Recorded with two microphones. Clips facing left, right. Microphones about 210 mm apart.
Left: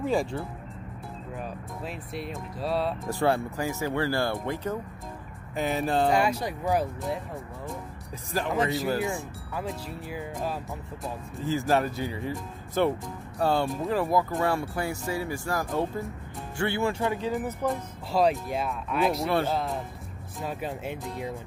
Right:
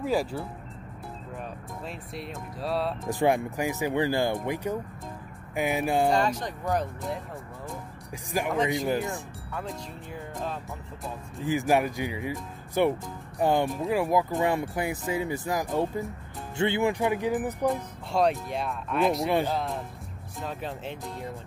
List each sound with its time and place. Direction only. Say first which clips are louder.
0.0 s speech: even; 5° right (ahead or behind)
3.1 s speech: right 3 dB; 15° right (ahead or behind)
6.0 s speech: left 1 dB; 10° left (ahead or behind)
8.3 s speech: right 1 dB; 15° right (ahead or behind)
9.0 s speech: left 3 dB; centre (ahead or behind)
11.4 s speech: right 1 dB; 15° right (ahead or behind)
17.6 s speech: right 2 dB; centre (ahead or behind)
19.2 s speech: even; 15° right (ahead or behind)
19.5 s speech: left 1 dB; centre (ahead or behind)